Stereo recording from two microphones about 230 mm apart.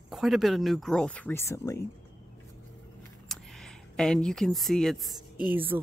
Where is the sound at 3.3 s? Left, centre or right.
Centre.